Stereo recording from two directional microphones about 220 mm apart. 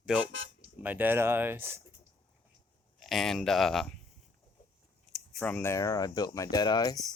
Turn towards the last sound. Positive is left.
turn(degrees=15)  # may be behind; listen again after turning